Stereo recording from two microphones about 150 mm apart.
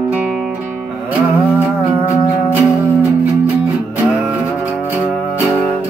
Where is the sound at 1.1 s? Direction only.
5° right (ahead or behind).